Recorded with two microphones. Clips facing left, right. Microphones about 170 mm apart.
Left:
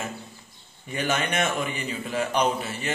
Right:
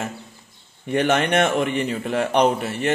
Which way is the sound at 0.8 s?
65° right (ahead or behind).